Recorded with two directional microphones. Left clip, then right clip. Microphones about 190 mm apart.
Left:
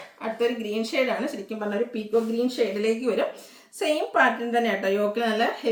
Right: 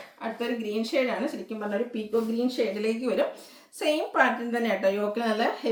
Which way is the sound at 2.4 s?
15° left (ahead or behind).